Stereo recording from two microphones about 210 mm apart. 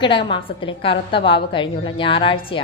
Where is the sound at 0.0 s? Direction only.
25° left (ahead or behind).